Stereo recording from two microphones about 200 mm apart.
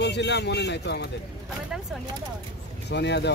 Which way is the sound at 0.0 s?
60° left (ahead or behind).